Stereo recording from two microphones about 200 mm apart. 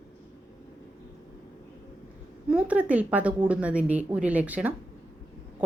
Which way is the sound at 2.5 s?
5° right (ahead or behind).